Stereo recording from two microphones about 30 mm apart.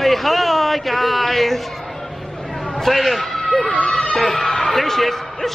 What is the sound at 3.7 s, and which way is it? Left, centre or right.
Speech, left.